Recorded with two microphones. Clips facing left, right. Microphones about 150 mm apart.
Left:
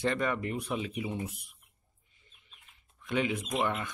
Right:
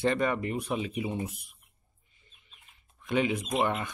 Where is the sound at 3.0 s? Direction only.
20° right (ahead or behind).